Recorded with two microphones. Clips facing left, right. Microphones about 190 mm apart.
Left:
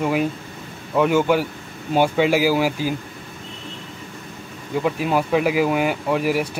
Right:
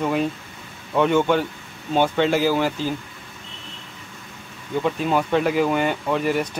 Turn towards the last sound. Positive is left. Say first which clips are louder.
# left 1 dB
turn(degrees=5)  # may be behind; listen again after turning